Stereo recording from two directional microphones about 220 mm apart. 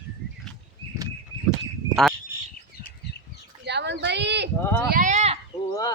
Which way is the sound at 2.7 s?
40° left (ahead or behind).